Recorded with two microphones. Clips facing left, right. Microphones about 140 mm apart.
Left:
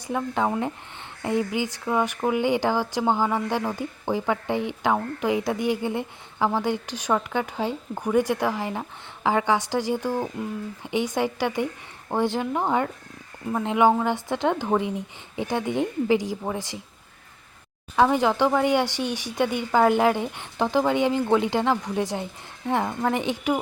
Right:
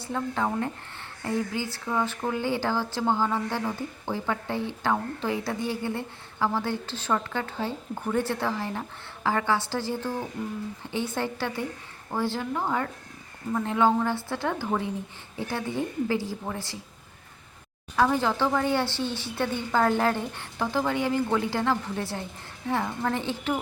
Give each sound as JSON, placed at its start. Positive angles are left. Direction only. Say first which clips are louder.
{"t": 0.0, "sound": "speech", "louder": "left 3 dB", "side_deg": 15}
{"t": 17.9, "sound": "speech", "louder": "left 4 dB", "side_deg": 20}